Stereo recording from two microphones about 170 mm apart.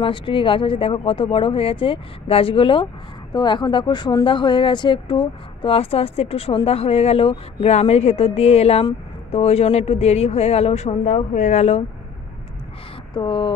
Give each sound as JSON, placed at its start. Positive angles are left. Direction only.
{"t": 0.0, "sound": "speech", "side_deg": 30}
{"t": 13.1, "sound": "speech", "side_deg": 25}